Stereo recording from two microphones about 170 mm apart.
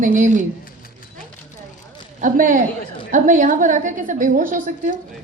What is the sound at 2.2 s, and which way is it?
Speech, 50° right (ahead or behind).